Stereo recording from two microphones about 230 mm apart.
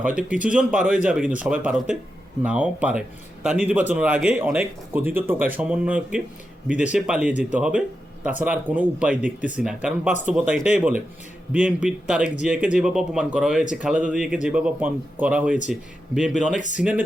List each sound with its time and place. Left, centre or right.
0.0 s speech: centre
16.6 s speech: left